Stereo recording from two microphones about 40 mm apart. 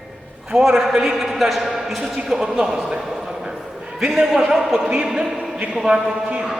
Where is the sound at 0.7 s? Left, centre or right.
Centre.